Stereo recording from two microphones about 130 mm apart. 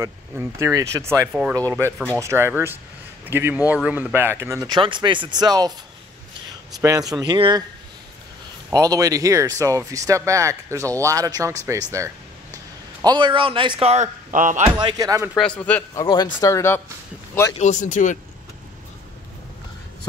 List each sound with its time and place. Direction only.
0.0 s a man's voice: 20° right (ahead or behind)
4.6 s speech: 35° right (ahead or behind)
6.8 s speech: 25° right (ahead or behind)
7.3 s speech: 40° right (ahead or behind)
8.7 s speech: 25° right (ahead or behind)
13.0 s speech: 35° right (ahead or behind)
14.3 s speech: 85° right
14.8 s speech: 30° right (ahead or behind)
15.3 s a man's voice: 10° left (ahead or behind)
15.9 s speech: 30° left (ahead or behind)
17.6 s speech: 65° left (ahead or behind)